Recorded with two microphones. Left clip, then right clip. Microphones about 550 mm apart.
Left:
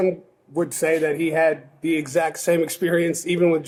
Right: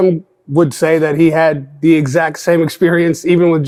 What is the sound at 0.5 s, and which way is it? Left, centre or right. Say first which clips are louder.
A man's voice: right 9 dB; right.